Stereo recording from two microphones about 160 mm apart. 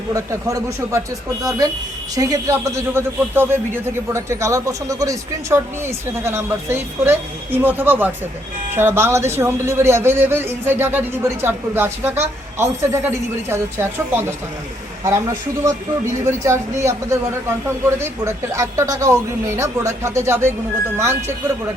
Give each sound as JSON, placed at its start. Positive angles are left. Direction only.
{"t": 0.1, "sound": "a man's voice", "side_deg": -20}
{"t": 16.2, "sound": "a man's voice", "side_deg": -15}